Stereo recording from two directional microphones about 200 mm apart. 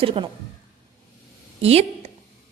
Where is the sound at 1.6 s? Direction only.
30° right (ahead or behind).